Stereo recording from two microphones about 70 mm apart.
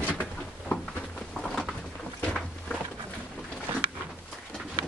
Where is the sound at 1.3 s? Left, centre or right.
Centre.